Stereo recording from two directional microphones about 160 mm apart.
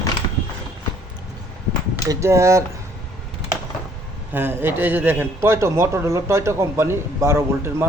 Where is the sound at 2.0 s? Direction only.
20° right (ahead or behind).